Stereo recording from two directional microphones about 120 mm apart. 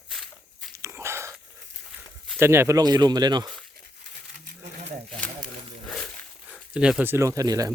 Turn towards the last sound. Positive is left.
turn(degrees=-30)  # may be behind; listen again after turning